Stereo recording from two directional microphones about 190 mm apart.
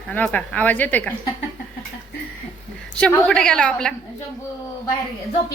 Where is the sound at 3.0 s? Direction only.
5° left (ahead or behind).